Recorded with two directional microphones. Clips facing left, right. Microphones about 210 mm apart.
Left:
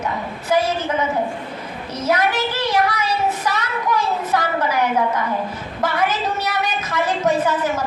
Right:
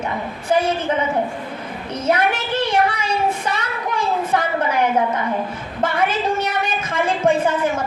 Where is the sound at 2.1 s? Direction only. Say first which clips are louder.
Even; 30° right (ahead or behind).